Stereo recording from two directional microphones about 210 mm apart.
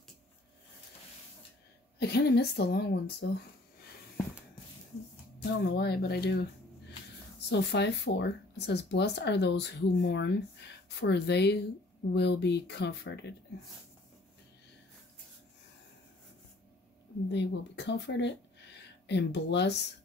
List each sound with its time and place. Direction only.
2.0 s speech: 50° left (ahead or behind)
5.4 s speech: 50° left (ahead or behind)
7.4 s speech: 55° left (ahead or behind)
17.3 s speech: 55° left (ahead or behind)